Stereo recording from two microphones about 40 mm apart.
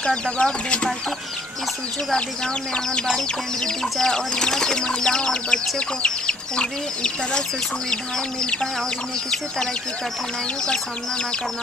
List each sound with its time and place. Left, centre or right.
0.0 s speech: left
2.1 s speech: left